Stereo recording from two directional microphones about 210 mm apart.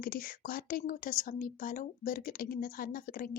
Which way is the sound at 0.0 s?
45° left (ahead or behind).